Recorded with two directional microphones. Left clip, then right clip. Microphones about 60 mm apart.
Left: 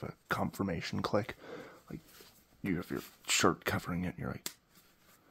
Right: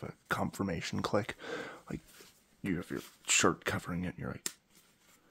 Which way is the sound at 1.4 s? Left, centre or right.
Right.